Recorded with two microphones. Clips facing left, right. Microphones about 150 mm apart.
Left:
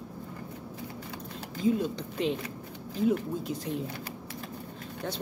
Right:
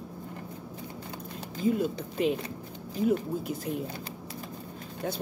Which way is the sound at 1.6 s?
5° right (ahead or behind).